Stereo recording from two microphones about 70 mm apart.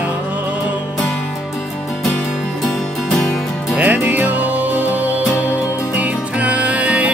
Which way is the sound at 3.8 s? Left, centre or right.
Right.